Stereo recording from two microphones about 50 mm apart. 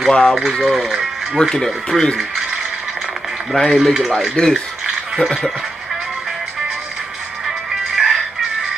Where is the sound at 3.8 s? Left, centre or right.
Centre.